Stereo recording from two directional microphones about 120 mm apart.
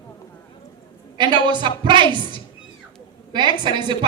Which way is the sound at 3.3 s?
40° right (ahead or behind).